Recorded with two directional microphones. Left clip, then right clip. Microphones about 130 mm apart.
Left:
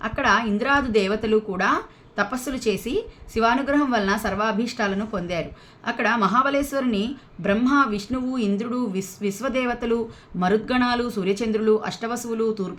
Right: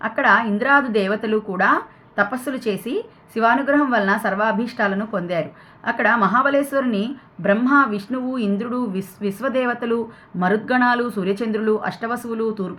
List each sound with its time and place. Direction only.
0.0 s a woman's voice: 20° left (ahead or behind)